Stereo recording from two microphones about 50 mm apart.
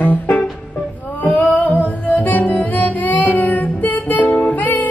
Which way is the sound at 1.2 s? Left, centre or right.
Left.